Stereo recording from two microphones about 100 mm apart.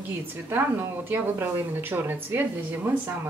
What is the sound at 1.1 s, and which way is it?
Speech, 20° right (ahead or behind).